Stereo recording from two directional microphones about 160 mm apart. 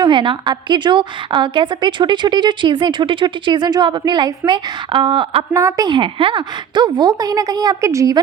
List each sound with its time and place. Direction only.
0.0 s a woman's voice: 30° right (ahead or behind)
5.5 s a woman's voice: 20° right (ahead or behind)